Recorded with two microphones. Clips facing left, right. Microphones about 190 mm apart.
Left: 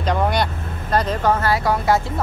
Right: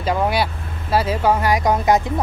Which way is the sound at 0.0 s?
5° right (ahead or behind).